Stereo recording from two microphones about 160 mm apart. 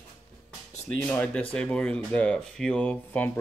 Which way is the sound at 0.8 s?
10° left (ahead or behind).